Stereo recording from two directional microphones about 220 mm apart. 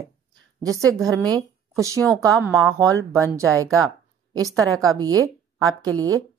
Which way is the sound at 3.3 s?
15° right (ahead or behind).